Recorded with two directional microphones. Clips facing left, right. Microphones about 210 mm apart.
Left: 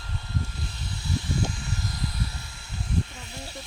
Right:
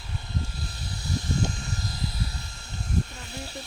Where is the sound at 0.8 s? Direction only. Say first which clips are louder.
Even; 40° right (ahead or behind).